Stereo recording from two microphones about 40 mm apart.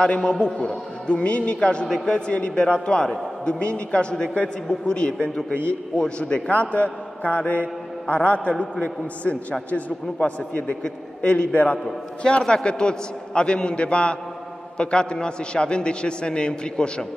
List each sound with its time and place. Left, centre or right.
0.0 s a man's voice: left
6.5 s a man's voice: left
10.8 s a man's voice: left